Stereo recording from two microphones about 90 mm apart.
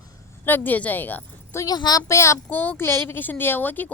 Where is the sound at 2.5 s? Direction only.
20° left (ahead or behind).